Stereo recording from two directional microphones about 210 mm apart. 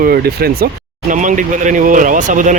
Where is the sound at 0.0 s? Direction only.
45° right (ahead or behind).